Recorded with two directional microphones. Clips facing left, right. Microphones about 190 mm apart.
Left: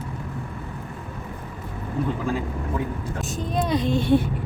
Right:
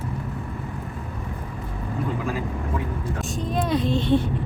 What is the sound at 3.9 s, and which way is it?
Speech, 10° left (ahead or behind).